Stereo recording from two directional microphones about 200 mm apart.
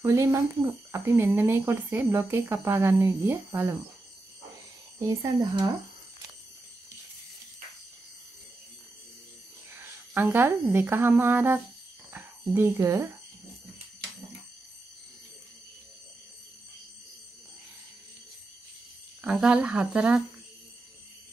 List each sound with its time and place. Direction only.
0.0 s speech: 15° right (ahead or behind)
5.0 s speech: 15° right (ahead or behind)
9.8 s speech: 10° right (ahead or behind)
19.2 s speech: 5° right (ahead or behind)